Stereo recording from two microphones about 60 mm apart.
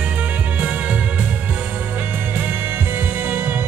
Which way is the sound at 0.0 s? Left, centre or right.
Right.